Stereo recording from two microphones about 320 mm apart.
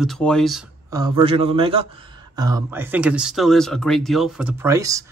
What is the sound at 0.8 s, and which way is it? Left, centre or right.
A man's voice, centre.